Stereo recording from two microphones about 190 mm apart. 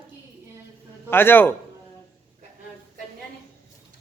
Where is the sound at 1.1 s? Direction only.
10° left (ahead or behind).